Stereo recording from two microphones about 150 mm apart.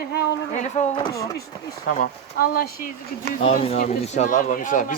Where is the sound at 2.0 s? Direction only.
75° left (ahead or behind).